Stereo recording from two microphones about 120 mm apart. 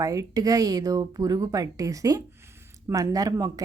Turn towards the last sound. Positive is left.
turn(degrees=-30)  # may be behind; listen again after turning